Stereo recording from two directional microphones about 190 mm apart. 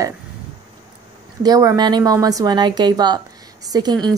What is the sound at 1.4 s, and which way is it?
A woman's voice, 20° right (ahead or behind).